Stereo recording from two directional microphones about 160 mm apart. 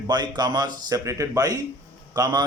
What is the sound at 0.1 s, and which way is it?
A man's voice, 25° right (ahead or behind).